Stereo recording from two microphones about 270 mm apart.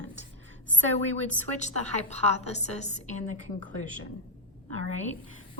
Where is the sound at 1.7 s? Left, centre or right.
Right.